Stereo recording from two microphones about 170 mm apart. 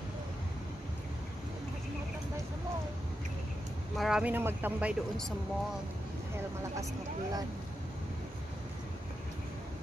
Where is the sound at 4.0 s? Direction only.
5° right (ahead or behind).